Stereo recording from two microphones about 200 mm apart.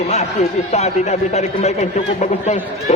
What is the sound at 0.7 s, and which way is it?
Speech, 35° left (ahead or behind).